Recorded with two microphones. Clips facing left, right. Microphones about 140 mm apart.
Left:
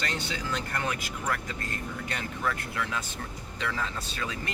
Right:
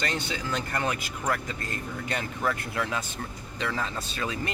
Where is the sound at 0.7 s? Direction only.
25° right (ahead or behind).